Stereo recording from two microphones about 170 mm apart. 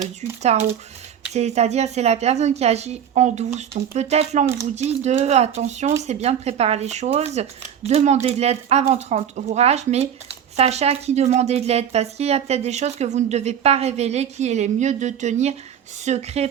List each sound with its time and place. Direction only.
0.2 s speech: 40° right (ahead or behind)